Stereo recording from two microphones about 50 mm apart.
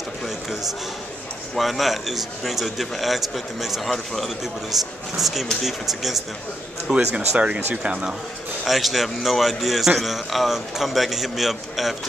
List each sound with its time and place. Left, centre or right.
0.5 s a sound: centre
1.5 s a man's voice: centre
7.2 s speech: right
8.6 s a man's voice: centre